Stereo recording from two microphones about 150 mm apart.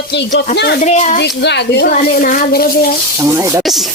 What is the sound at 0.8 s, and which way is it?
Speech, 50° left (ahead or behind).